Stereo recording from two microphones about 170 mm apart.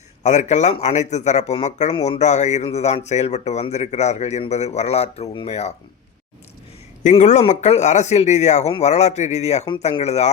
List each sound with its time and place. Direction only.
0.2 s speech: 45° left (ahead or behind)
7.0 s speech: 45° left (ahead or behind)